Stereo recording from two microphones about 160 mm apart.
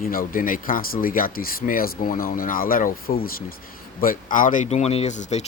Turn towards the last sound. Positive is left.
turn(degrees=45)  # may be behind; listen again after turning